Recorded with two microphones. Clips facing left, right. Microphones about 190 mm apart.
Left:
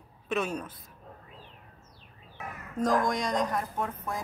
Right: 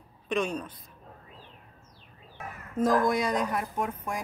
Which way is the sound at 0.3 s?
5° left (ahead or behind).